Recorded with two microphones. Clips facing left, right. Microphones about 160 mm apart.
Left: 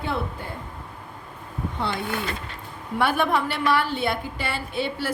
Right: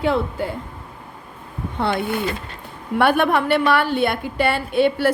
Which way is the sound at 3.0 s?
60° right (ahead or behind).